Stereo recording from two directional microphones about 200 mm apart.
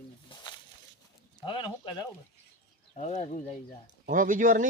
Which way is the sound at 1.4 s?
25° left (ahead or behind).